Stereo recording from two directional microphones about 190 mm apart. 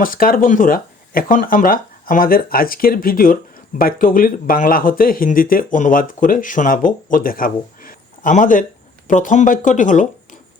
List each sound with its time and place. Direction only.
0.0 s speech: 50° left (ahead or behind)